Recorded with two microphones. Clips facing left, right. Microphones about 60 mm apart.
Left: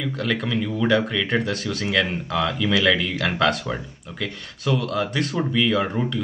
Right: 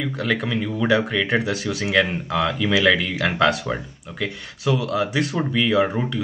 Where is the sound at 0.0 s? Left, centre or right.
Centre.